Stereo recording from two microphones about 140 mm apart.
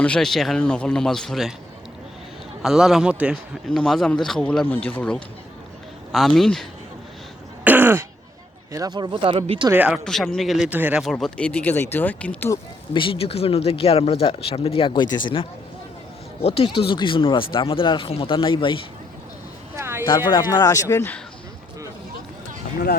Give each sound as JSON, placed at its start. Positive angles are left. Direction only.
{"t": 0.0, "sound": "speech", "side_deg": 5}
{"t": 2.6, "sound": "speech", "side_deg": 0}
{"t": 3.7, "sound": "a man's voice", "side_deg": 5}
{"t": 7.6, "sound": "throat clearing", "side_deg": -15}
{"t": 8.7, "sound": "speech", "side_deg": -30}
{"t": 9.7, "sound": "speech", "side_deg": -10}
{"t": 10.0, "sound": "speech", "side_deg": 5}
{"t": 10.7, "sound": "speech", "side_deg": -10}
{"t": 11.0, "sound": "a man's voice", "side_deg": 5}
{"t": 12.9, "sound": "speech", "side_deg": 35}
{"t": 19.7, "sound": "a sound", "side_deg": -20}
{"t": 20.3, "sound": "speech", "side_deg": 30}